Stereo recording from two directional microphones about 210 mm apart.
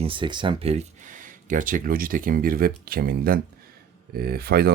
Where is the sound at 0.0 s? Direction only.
25° right (ahead or behind).